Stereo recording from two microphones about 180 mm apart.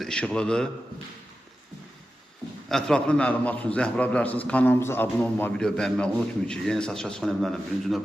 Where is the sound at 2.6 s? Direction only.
5° left (ahead or behind).